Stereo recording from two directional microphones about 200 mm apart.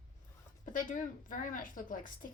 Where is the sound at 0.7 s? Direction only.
40° left (ahead or behind).